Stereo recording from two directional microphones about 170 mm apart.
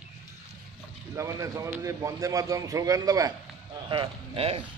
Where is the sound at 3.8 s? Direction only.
30° right (ahead or behind).